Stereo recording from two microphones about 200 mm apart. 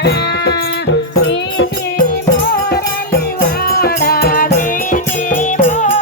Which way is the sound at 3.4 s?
50° left (ahead or behind).